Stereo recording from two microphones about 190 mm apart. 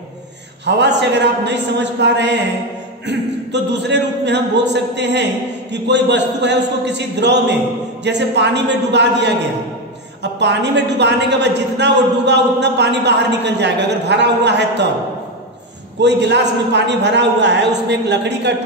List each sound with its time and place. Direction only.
0.7 s a woman's voice: 65° right (ahead or behind)
16.0 s a woman's voice: 65° right (ahead or behind)